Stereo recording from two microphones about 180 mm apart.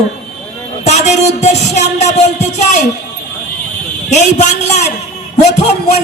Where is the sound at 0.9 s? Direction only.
40° left (ahead or behind).